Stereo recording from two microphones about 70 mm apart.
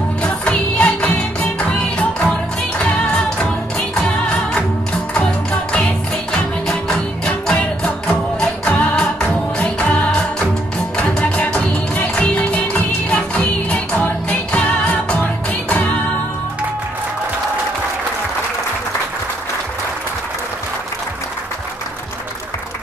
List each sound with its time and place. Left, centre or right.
0.2 s music: centre